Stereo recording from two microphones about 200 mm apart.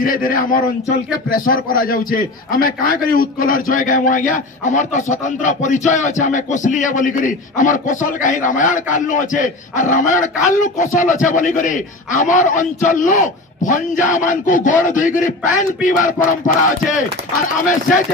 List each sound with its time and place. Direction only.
0.0 s a man's voice: 45° left (ahead or behind)
5.1 s music: 40° left (ahead or behind)